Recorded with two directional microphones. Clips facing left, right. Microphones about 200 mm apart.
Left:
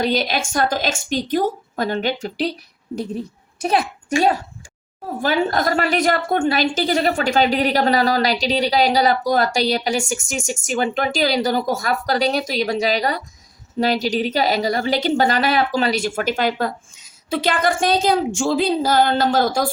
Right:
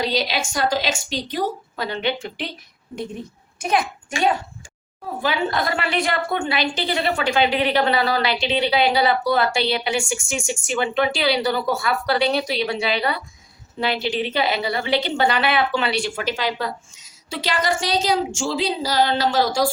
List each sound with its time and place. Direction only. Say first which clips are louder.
0.0 s a woman's voice: left 3 dB; 50° left (ahead or behind)